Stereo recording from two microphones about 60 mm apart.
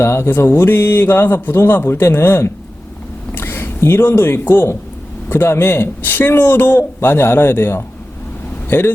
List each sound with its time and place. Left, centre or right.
0.0 s a man's voice: left